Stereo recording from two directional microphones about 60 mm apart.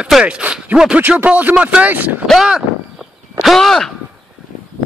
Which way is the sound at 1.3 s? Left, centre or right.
Right.